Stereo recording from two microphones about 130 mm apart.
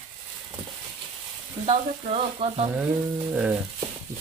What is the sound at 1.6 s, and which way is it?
Speech, 50° right (ahead or behind).